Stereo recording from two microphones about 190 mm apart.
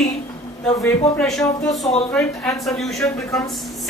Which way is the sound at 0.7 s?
15° left (ahead or behind).